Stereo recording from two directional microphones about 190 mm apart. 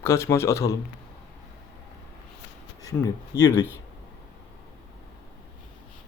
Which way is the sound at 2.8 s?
15° left (ahead or behind).